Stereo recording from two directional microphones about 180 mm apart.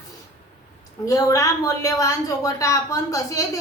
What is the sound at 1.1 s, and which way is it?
Speech, 20° left (ahead or behind).